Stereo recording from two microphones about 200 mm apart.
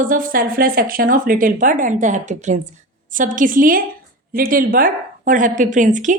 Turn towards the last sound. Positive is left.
turn(degrees=-40)  # may be behind; listen again after turning